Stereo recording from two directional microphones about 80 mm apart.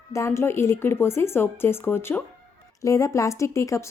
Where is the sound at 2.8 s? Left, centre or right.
Left.